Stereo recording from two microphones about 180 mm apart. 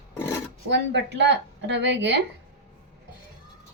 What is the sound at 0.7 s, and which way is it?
Speech, 75° right (ahead or behind).